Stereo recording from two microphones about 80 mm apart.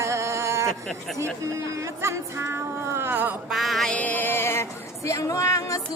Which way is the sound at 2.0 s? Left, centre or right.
Right.